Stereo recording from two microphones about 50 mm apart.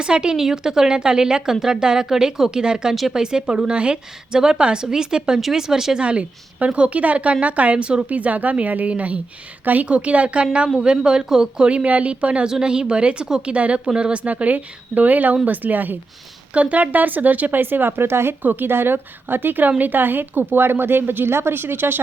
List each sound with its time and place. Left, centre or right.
0.0 s speech: centre
2.9 s speech: centre
3.2 s speech: centre
6.1 s a woman's voice: right
18.4 s speech: right